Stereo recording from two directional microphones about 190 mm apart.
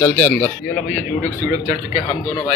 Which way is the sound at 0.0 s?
10° left (ahead or behind).